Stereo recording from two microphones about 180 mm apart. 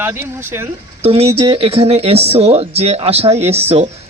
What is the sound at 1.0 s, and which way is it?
Speech, 35° right (ahead or behind).